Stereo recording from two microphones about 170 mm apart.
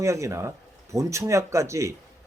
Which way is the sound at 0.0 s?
15° right (ahead or behind).